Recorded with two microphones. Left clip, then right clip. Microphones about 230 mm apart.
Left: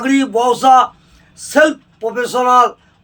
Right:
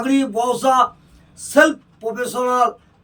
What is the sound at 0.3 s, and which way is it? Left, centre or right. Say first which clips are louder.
Speech: left 7 dB; centre.